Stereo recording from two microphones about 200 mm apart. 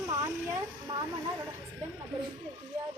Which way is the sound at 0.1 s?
15° right (ahead or behind).